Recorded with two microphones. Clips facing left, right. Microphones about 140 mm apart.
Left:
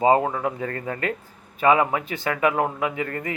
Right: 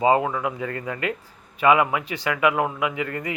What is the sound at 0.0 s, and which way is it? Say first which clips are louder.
Speech: left 1 dB; 35° left (ahead or behind).